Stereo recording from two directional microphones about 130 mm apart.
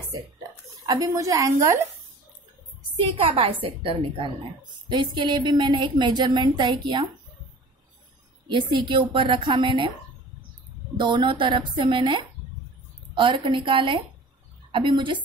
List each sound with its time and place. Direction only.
0.8 s a woman's voice: 30° right (ahead or behind)
3.1 s a woman's voice: 45° right (ahead or behind)
8.5 s a woman's voice: 40° right (ahead or behind)
11.0 s a woman's voice: 35° right (ahead or behind)